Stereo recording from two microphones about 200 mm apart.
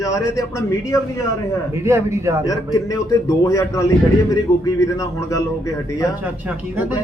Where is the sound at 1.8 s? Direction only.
15° right (ahead or behind).